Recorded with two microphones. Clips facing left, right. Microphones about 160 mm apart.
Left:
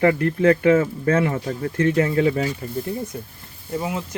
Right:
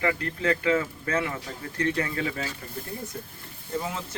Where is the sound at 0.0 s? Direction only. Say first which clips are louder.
Left 10 dB; 35° left (ahead or behind).